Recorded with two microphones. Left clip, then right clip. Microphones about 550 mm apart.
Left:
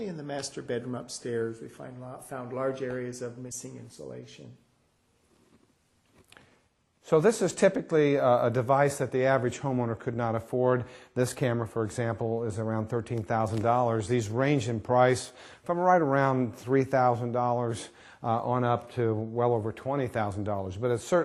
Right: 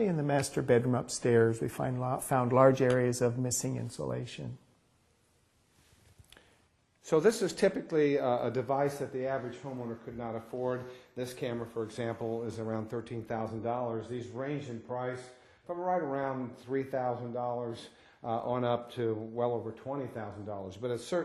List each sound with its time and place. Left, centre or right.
0.0 s speech: right
1.8 s speech: right
2.5 s speech: right
7.0 s speech: left
9.1 s speech: left
9.6 s speech: left
11.7 s speech: left
12.0 s speech: left
14.3 s speech: left
15.6 s speech: left
18.2 s speech: left